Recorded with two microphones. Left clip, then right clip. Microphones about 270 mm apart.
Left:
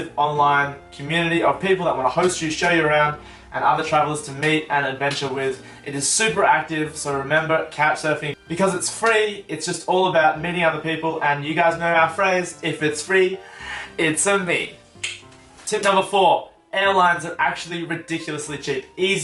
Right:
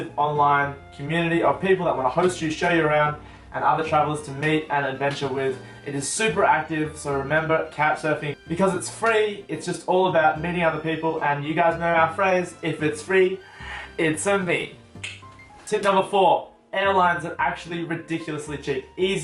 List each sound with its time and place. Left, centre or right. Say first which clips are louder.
0.2 s speech: left 2 dB; right
0.4 s speech: left 2 dB; centre
2.4 s speech: left 3 dB; centre
9.8 s speech: left 1 dB; right
10.1 s speech: left 2 dB; centre
16.1 s speech: left 2 dB; right
17.0 s speech: left 3 dB; centre